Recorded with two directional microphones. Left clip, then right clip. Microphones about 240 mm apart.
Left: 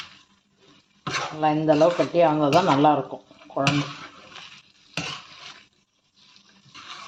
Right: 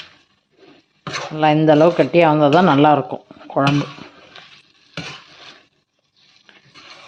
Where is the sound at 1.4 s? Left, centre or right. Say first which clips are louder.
Right 7 dB; right.